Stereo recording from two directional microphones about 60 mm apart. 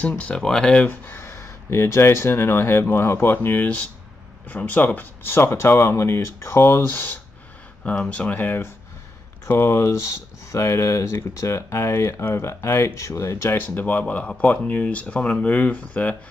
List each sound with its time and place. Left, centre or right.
0.2 s speech: centre
0.8 s speech: left
1.2 s speech: left
4.5 s speech: left
7.8 s speech: left
9.5 s speech: left
13.7 s speech: left